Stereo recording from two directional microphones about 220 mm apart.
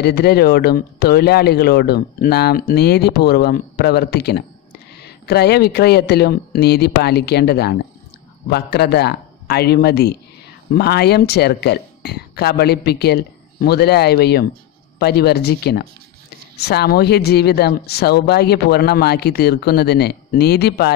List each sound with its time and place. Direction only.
0.0 s speech: 45° left (ahead or behind)